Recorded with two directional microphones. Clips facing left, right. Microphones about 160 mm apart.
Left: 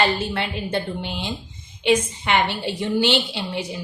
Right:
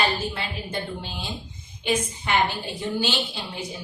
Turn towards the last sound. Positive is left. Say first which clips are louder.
# left 6 dB
turn(degrees=70)  # may be behind; listen again after turning